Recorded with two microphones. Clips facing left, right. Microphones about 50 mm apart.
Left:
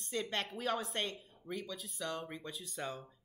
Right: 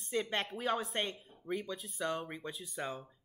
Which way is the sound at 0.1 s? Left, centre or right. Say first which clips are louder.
Right 3 dB; centre.